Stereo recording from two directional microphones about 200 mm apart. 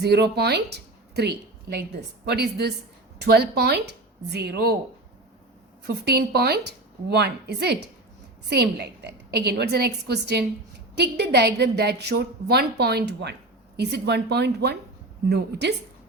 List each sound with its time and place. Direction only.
0.0 s a woman's voice: 55° right (ahead or behind)
5.8 s a woman's voice: 55° right (ahead or behind)